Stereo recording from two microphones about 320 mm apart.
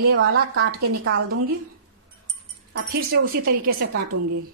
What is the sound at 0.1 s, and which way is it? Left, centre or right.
A woman's voice, right.